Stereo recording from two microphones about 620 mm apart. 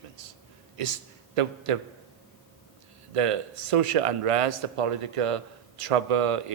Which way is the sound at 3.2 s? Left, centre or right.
Right.